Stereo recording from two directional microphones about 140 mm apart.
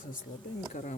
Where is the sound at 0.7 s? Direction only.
60° left (ahead or behind).